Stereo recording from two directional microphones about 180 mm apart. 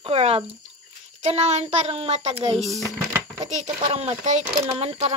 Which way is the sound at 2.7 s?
15° right (ahead or behind).